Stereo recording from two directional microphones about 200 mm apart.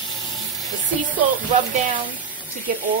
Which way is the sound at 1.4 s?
40° right (ahead or behind).